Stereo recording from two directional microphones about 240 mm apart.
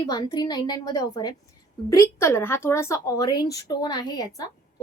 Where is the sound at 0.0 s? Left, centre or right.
Centre.